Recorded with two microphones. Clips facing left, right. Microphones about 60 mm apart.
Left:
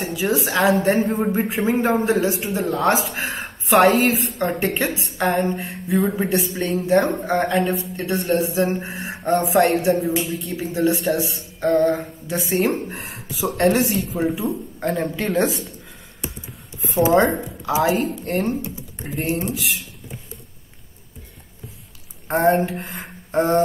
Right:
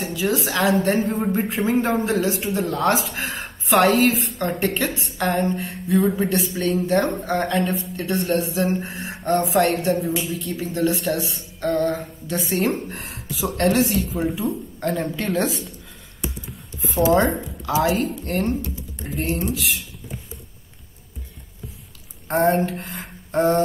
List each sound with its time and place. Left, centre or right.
0.3 s a man's voice: centre
0.7 s speech: left
1.0 s a man's voice: centre
8.7 s mantra: centre
9.4 s a man's voice: centre
10.5 s a man's voice: centre
16.8 s a sound: centre
17.2 s speech: centre
19.0 s speech: left
22.3 s speech: centre
22.7 s a sound: centre